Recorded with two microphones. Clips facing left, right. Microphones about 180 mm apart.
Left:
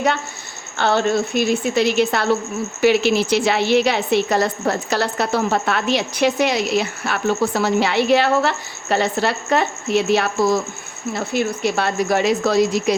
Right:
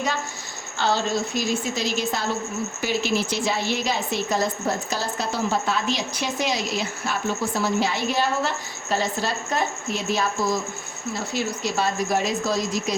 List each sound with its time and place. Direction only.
0.8 s a woman's voice: 60° left (ahead or behind)